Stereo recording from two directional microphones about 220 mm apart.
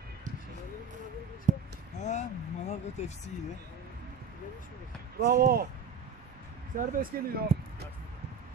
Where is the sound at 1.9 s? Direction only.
30° left (ahead or behind).